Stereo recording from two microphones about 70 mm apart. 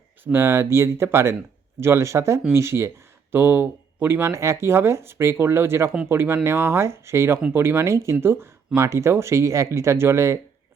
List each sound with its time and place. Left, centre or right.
0.3 s speech: right
4.3 s speech: right